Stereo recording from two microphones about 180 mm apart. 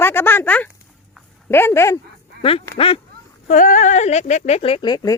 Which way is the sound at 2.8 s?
30° left (ahead or behind).